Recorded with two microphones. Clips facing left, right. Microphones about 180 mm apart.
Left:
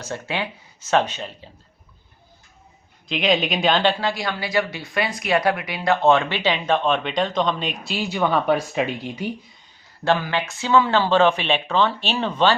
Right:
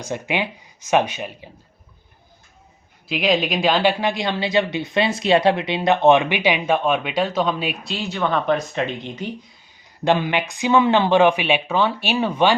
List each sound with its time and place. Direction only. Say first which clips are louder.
0.0 s speech: right 3 dB; 15° right (ahead or behind)
3.1 s speech: right 1 dB; centre (ahead or behind)
4.0 s speech: right 3 dB; 20° right (ahead or behind)
7.9 s speech: left 2 dB; 10° left (ahead or behind)
10.0 s speech: right 2 dB; 20° right (ahead or behind)